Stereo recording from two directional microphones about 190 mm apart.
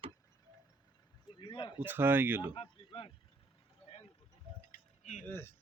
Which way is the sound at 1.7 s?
10° right (ahead or behind).